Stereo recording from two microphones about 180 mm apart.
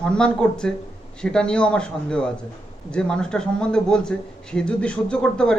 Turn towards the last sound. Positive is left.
turn(degrees=5)  # may be behind; listen again after turning